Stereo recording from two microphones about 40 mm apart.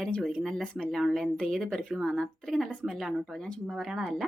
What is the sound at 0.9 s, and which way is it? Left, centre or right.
Speech, centre.